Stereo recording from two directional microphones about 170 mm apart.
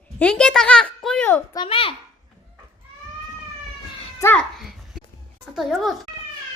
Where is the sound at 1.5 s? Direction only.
30° left (ahead or behind).